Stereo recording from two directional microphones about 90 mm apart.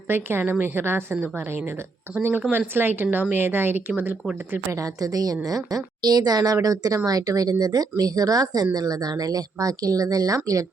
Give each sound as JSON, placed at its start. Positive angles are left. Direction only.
{"t": 0.1, "sound": "a woman's voice", "side_deg": -25}
{"t": 4.7, "sound": "a woman's voice", "side_deg": -40}